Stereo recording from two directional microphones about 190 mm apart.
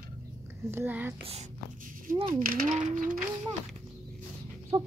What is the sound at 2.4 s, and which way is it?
Speech, 50° right (ahead or behind).